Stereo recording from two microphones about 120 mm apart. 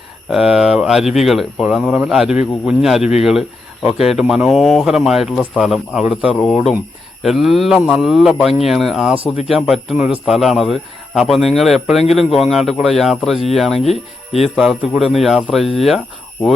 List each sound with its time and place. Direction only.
0.3 s speech: 5° right (ahead or behind)
13.8 s speech: 60° left (ahead or behind)
14.5 s speech: centre (ahead or behind)